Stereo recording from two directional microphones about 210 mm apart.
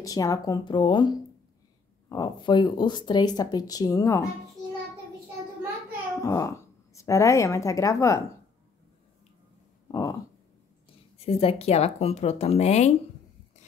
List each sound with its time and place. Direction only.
0.0 s speech: 15° left (ahead or behind)
6.2 s speech: 15° left (ahead or behind)
9.8 s a sound: 15° left (ahead or behind)
11.2 s speech: 30° left (ahead or behind)